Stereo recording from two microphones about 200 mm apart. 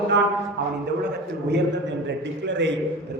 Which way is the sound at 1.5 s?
60° right (ahead or behind).